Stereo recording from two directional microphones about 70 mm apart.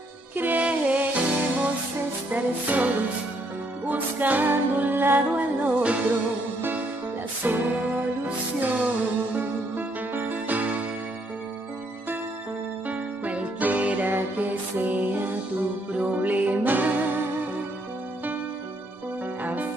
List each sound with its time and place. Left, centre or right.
0.4 s music: right
7.4 s music: right
12.8 s music: right
19.4 s music: right